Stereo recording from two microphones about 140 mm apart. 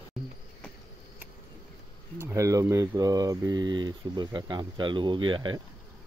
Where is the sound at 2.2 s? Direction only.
20° right (ahead or behind).